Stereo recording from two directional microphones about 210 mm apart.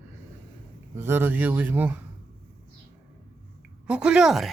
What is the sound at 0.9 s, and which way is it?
Speech, 10° right (ahead or behind).